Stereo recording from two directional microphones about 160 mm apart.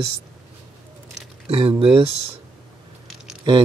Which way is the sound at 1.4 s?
35° right (ahead or behind).